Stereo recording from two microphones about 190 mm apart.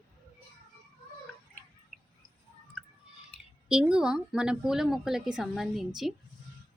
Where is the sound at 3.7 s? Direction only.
5° right (ahead or behind).